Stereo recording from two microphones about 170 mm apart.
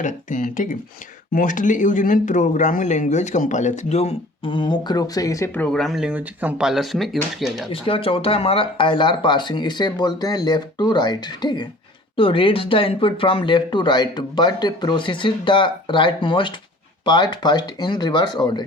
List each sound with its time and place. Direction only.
0.0 s speech: 50° left (ahead or behind); by 5.6 s 20° left (ahead or behind)
5.6 s speech: centre (ahead or behind)
7.7 s speech: 30° left (ahead or behind)